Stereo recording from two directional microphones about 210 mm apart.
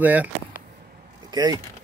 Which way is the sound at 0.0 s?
10° right (ahead or behind).